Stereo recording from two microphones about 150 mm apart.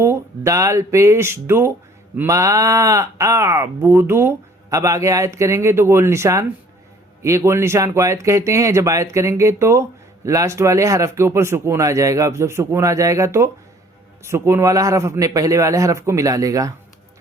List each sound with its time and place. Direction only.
0.0 s speech: 20° right (ahead or behind)